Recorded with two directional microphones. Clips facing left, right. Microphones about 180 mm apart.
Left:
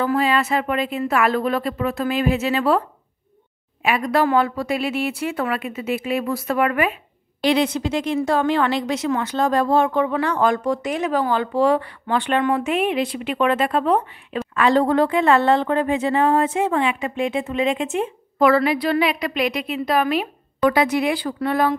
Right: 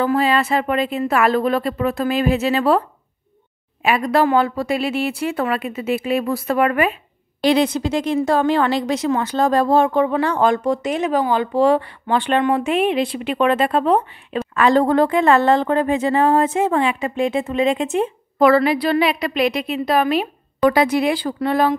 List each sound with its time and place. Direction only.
0.0 s a woman's voice: 30° right (ahead or behind)
3.8 s a woman's voice: 30° right (ahead or behind)
14.5 s a woman's voice: 45° right (ahead or behind); by 21.7 s 30° right (ahead or behind)